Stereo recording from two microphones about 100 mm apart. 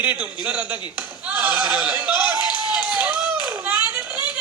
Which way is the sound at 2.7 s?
15° right (ahead or behind).